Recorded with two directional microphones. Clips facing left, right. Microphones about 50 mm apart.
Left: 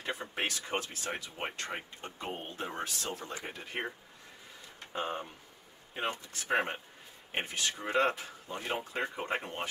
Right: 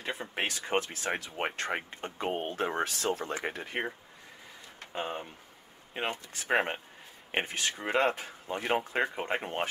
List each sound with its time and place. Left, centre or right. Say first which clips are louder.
0.0 s speech: right 1 dB; right
4.9 s speech: even; right